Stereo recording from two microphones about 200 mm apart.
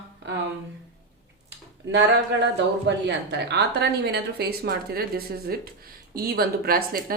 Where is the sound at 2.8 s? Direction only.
60° right (ahead or behind).